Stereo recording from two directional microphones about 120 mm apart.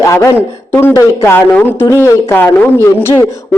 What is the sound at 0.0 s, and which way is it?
A woman's voice, 25° left (ahead or behind).